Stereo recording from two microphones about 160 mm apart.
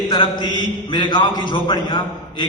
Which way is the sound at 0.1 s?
30° left (ahead or behind).